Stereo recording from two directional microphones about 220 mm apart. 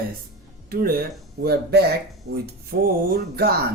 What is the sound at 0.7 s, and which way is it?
Speech, 40° right (ahead or behind).